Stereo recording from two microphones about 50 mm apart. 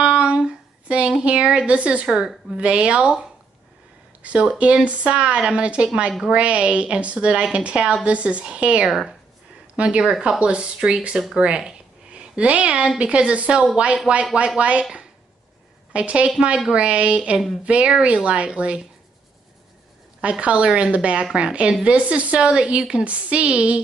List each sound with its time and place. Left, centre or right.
0.0 s a sound: right
2.0 s a woman's voice: centre
10.0 s a woman's voice: centre
10.4 s a woman's voice: right
11.3 s a sound: centre
13.0 s a woman's voice: right
14.1 s a woman's voice: centre
14.6 s a woman's voice: right
15.9 s a woman's voice: right
20.2 s a woman's voice: right